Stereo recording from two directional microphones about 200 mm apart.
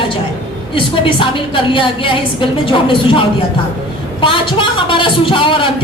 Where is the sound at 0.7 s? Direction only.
25° left (ahead or behind).